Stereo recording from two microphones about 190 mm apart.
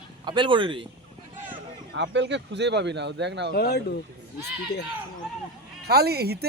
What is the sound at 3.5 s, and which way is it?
Speech, 55° left (ahead or behind).